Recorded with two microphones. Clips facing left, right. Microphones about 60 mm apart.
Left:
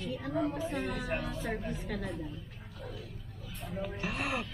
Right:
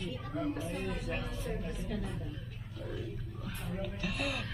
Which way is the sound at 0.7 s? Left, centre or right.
Left.